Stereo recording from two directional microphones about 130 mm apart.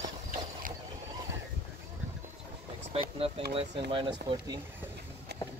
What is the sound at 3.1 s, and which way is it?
Speech, 45° right (ahead or behind).